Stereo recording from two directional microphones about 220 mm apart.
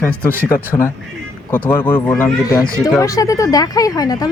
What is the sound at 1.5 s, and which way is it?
Speech, 10° left (ahead or behind).